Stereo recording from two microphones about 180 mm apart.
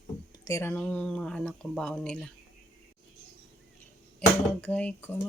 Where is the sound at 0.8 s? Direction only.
5° left (ahead or behind).